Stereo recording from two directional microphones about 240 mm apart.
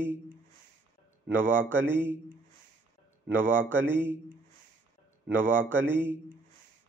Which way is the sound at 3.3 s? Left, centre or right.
Centre.